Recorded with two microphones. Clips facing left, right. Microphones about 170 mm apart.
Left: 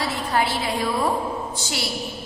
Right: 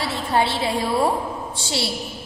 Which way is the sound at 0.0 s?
30° right (ahead or behind).